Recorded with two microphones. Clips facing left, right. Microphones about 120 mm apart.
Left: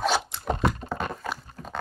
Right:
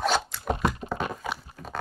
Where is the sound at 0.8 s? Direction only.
5° right (ahead or behind).